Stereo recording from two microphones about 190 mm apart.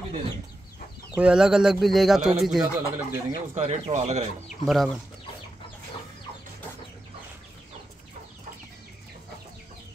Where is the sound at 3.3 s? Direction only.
30° right (ahead or behind).